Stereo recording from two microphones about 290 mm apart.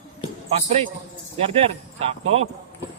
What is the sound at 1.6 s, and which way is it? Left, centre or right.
Speech, right.